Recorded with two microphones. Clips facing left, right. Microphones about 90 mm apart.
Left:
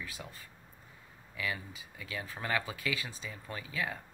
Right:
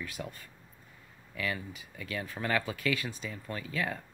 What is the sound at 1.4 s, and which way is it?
Speech, 15° left (ahead or behind).